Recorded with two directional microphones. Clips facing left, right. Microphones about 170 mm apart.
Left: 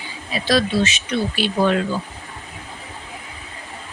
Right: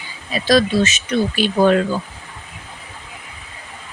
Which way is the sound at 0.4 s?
45° right (ahead or behind).